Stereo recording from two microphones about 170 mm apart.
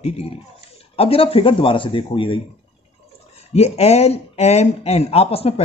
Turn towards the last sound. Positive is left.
turn(degrees=35)  # may be behind; listen again after turning